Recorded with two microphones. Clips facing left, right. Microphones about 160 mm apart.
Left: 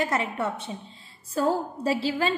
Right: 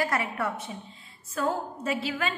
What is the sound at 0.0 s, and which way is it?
A woman's voice, 25° left (ahead or behind).